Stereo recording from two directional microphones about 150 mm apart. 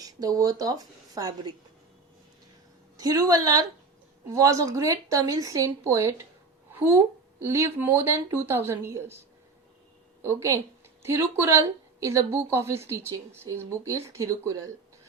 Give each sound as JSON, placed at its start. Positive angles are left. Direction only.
{"t": 0.0, "sound": "a woman's voice", "side_deg": -25}
{"t": 3.0, "sound": "a woman's voice", "side_deg": -25}
{"t": 10.2, "sound": "a woman's voice", "side_deg": -20}